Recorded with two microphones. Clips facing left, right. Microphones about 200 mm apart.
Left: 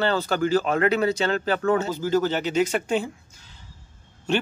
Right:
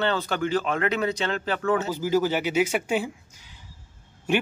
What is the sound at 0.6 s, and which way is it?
Speech, 40° left (ahead or behind).